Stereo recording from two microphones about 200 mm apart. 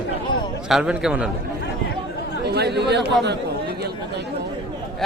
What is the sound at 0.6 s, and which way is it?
Speech, 5° right (ahead or behind).